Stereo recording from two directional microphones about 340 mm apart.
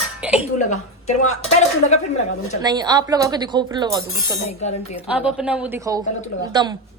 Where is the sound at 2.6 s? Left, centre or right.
Centre.